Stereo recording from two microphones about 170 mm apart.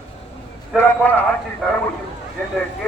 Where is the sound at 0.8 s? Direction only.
10° left (ahead or behind).